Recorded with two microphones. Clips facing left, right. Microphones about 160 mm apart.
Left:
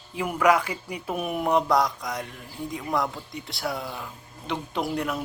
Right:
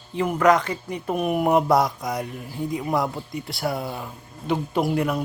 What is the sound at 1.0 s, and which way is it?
A man's voice, 5° right (ahead or behind).